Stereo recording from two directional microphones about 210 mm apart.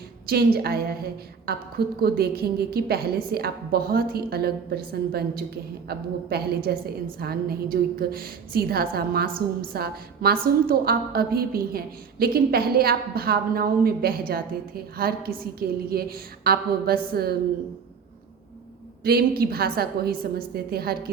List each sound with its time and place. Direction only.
0.3 s a woman's voice: 50° right (ahead or behind)
19.0 s a woman's voice: 45° right (ahead or behind)